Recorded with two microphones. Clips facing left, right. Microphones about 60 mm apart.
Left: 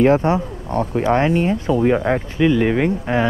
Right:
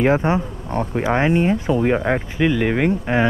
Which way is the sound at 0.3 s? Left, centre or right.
Right.